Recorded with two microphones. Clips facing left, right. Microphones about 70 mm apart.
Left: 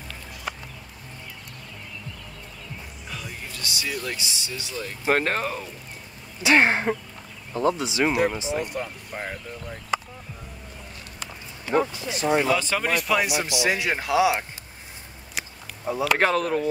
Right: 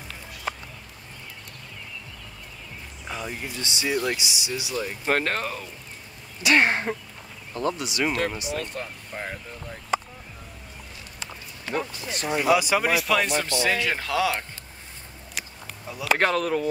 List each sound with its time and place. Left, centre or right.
3.1 s speech: right
5.0 s speech: centre
7.7 s speech: left
8.6 s speech: centre
11.7 s speech: centre
12.4 s speech: centre
15.4 s a sound: centre
15.8 s speech: left
16.2 s speech: centre